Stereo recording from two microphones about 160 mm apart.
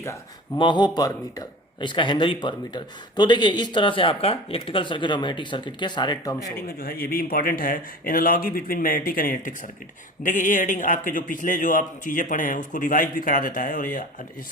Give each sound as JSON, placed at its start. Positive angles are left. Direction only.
{"t": 0.0, "sound": "a man's voice", "side_deg": 20}
{"t": 6.7, "sound": "a man's voice", "side_deg": 70}